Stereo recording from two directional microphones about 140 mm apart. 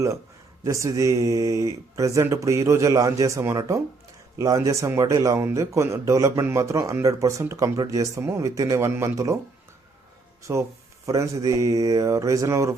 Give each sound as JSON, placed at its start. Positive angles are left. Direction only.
{"t": 0.6, "sound": "speech", "side_deg": -25}
{"t": 10.4, "sound": "speech", "side_deg": -20}